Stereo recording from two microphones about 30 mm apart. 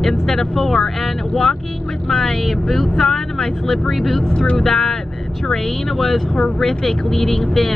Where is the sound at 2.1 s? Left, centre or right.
Centre.